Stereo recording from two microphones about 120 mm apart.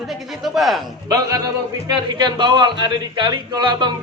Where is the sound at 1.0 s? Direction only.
30° right (ahead or behind).